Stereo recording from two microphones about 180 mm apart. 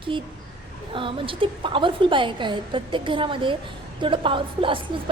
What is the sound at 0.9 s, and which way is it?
A woman's voice, 30° right (ahead or behind).